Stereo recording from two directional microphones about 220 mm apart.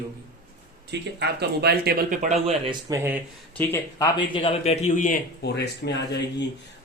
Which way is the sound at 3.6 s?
10° left (ahead or behind).